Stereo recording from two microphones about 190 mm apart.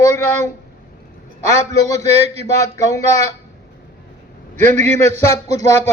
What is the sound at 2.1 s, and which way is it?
Speech, 35° right (ahead or behind).